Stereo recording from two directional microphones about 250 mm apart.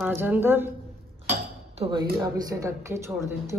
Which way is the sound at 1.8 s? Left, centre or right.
Centre.